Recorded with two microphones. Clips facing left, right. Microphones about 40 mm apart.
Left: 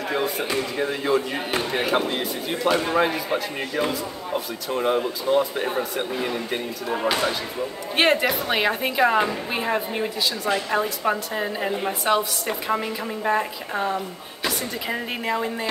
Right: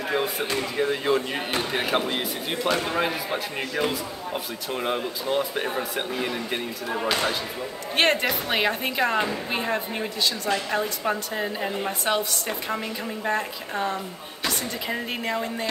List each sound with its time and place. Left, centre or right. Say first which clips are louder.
0.1 s a woman's voice: left 1 dB; centre